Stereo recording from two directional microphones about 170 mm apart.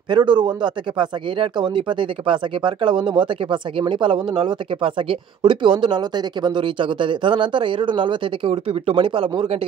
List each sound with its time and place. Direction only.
0.1 s speech: 25° right (ahead or behind)